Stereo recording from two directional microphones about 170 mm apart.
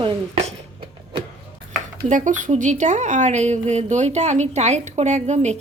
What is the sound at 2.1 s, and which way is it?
Speech, 45° right (ahead or behind).